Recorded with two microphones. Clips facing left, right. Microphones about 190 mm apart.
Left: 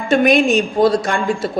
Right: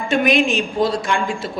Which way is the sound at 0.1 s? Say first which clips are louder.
Left 4 dB; 40° left (ahead or behind).